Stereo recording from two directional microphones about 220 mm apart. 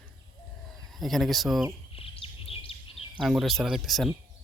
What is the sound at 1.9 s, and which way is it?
Bird vocalization, 25° left (ahead or behind).